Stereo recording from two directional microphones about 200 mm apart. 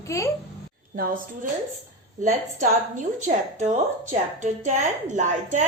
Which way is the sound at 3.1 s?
35° right (ahead or behind).